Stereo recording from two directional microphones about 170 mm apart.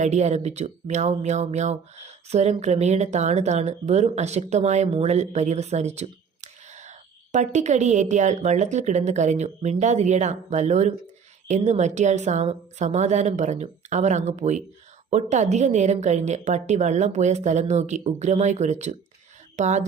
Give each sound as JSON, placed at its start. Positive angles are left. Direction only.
{"t": 0.0, "sound": "speech", "side_deg": -40}